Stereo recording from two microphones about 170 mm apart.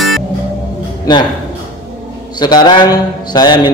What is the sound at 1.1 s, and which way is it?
Mantra, 25° left (ahead or behind).